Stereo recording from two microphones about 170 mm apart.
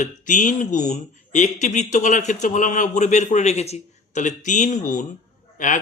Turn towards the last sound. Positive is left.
turn(degrees=50)  # may be behind; listen again after turning